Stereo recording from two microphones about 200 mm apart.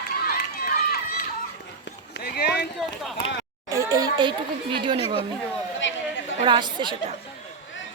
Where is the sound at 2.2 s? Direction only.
55° left (ahead or behind).